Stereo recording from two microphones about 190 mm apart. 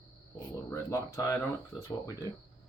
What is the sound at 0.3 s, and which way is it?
Speech, 15° left (ahead or behind).